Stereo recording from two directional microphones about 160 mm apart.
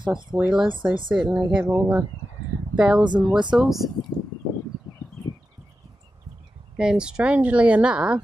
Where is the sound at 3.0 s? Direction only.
30° right (ahead or behind).